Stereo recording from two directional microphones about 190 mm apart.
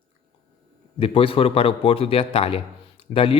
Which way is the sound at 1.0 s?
30° left (ahead or behind).